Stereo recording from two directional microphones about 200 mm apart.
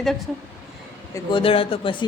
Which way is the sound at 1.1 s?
25° left (ahead or behind).